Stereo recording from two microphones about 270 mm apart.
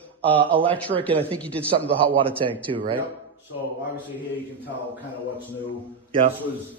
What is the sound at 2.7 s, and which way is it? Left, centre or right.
Speech, centre.